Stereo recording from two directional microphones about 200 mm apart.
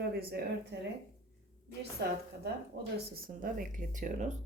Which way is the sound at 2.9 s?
45° right (ahead or behind).